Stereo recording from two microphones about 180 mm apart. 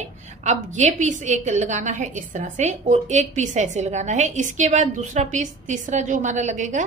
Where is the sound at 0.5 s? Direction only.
40° right (ahead or behind).